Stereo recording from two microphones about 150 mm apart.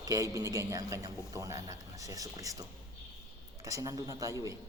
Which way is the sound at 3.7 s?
20° right (ahead or behind).